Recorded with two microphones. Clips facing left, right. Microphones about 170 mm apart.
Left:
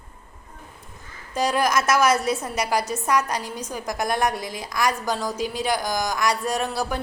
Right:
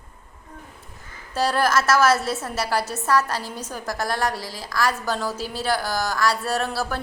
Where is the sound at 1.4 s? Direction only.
15° left (ahead or behind).